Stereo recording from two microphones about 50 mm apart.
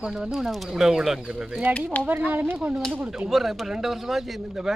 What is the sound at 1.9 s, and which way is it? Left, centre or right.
Speech, left.